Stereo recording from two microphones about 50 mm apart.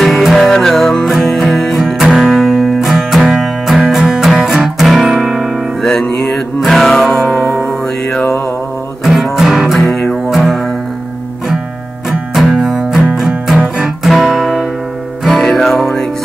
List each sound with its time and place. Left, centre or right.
0.2 s music: centre
5.8 s music: centre
9.0 s music: centre
12.4 s music: centre
13.6 s music: centre
14.0 s music: centre